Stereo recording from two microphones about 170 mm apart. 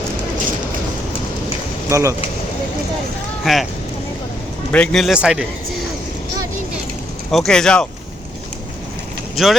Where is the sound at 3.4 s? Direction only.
Centre (ahead or behind).